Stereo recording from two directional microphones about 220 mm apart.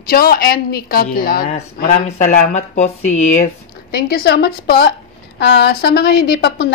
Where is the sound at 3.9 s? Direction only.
45° left (ahead or behind).